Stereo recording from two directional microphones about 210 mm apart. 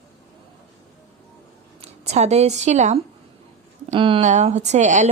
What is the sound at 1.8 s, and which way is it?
A woman's voice, 30° right (ahead or behind).